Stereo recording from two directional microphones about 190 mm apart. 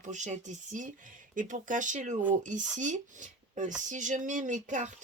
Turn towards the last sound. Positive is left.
turn(degrees=-40)  # may be behind; listen again after turning